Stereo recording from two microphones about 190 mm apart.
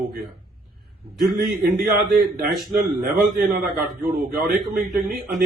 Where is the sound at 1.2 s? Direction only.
50° right (ahead or behind).